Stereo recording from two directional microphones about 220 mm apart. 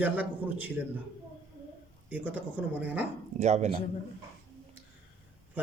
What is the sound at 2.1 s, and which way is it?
Speech, 5° right (ahead or behind).